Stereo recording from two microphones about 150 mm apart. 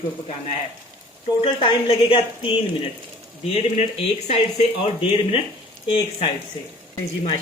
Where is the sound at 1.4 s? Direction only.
35° left (ahead or behind).